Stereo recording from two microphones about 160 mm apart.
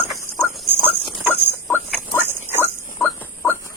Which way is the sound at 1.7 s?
10° left (ahead or behind).